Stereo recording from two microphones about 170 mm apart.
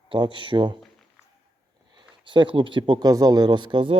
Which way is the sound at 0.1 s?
30° right (ahead or behind).